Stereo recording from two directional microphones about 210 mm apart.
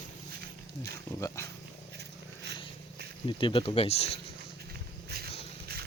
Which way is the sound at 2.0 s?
50° right (ahead or behind).